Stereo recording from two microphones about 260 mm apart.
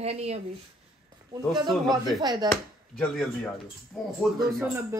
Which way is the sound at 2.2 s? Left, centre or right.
Centre.